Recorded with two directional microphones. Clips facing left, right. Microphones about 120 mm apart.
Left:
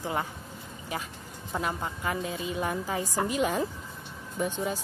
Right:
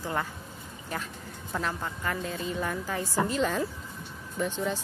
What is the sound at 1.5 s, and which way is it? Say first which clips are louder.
A woman's voice: left 1 dB; 15° left (ahead or behind).